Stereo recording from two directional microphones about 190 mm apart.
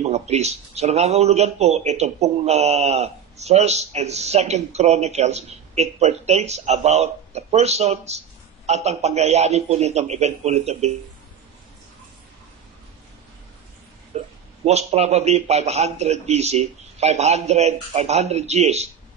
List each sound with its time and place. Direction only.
0.0 s speech: 35° right (ahead or behind)
14.1 s speech: 35° right (ahead or behind)